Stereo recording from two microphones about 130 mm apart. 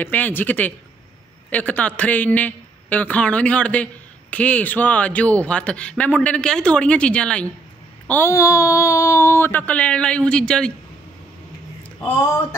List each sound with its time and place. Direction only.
0.0 s a man's voice: 15° left (ahead or behind)
8.1 s a man's voice: 20° left (ahead or behind)